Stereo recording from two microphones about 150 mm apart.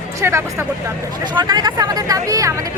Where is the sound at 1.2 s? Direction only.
30° right (ahead or behind).